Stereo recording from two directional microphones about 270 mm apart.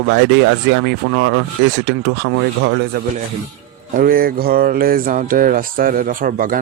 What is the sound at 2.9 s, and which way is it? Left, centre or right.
Speech, right.